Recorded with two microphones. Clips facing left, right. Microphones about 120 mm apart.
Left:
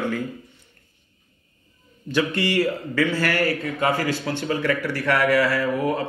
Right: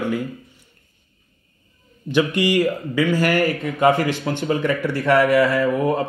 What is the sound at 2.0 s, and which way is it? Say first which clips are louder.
A man's voice: right 4 dB; 15° right (ahead or behind).